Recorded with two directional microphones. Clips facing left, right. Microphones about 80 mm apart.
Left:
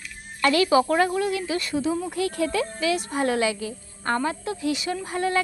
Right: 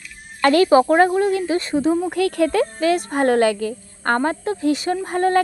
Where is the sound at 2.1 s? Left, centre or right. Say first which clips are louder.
Right 6 dB; right.